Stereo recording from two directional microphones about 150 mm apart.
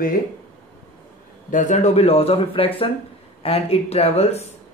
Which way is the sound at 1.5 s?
55° left (ahead or behind).